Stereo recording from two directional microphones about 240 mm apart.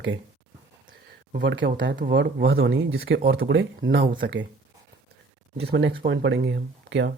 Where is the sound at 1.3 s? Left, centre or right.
Right.